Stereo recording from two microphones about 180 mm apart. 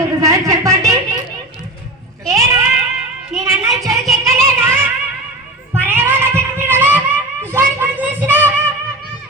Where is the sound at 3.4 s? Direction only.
15° right (ahead or behind).